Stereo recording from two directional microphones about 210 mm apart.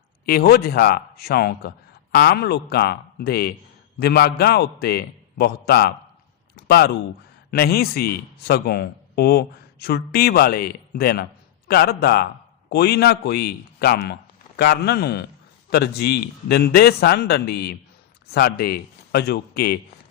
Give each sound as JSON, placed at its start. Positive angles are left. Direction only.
{"t": 0.3, "sound": "speech", "side_deg": 45}